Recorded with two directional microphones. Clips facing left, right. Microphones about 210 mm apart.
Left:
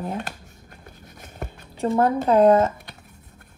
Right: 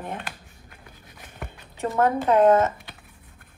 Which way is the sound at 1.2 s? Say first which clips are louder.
Left 4 dB; 40° left (ahead or behind).